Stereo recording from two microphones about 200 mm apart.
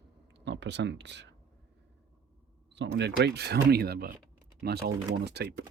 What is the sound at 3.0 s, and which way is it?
Speech, 60° right (ahead or behind).